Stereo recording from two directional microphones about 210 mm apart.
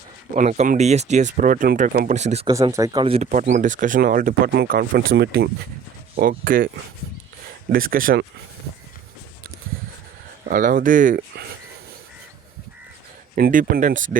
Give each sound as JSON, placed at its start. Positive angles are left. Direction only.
{"t": 0.3, "sound": "speech", "side_deg": -35}
{"t": 2.5, "sound": "speech", "side_deg": -15}
{"t": 7.7, "sound": "speech", "side_deg": -45}
{"t": 10.5, "sound": "speech", "side_deg": -40}
{"t": 13.3, "sound": "speech", "side_deg": -40}